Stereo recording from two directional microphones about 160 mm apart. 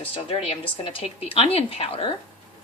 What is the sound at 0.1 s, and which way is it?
A woman's voice, 35° left (ahead or behind).